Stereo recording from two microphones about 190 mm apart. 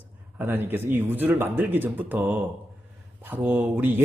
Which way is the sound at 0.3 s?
10° right (ahead or behind).